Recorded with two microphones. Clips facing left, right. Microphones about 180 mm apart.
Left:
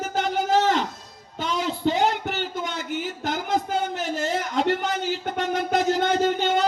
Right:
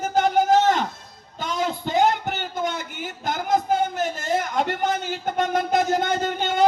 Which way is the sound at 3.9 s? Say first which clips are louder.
Right 2 dB; 50° right (ahead or behind).